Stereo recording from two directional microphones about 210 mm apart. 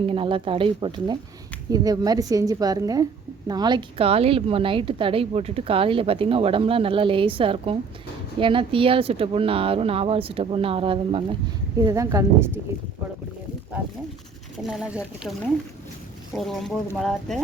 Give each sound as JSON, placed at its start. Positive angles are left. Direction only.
{"t": 0.0, "sound": "a woman's voice", "side_deg": -25}
{"t": 14.7, "sound": "speech", "side_deg": -5}